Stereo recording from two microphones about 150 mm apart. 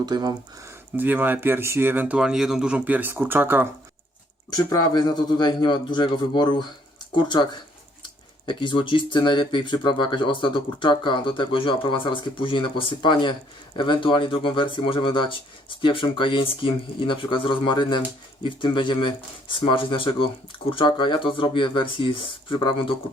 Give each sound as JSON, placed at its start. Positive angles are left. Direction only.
{"t": 0.0, "sound": "speech", "side_deg": -25}
{"t": 0.9, "sound": "speech", "side_deg": -10}
{"t": 4.5, "sound": "a man's voice", "side_deg": 25}
{"t": 8.4, "sound": "speech", "side_deg": 35}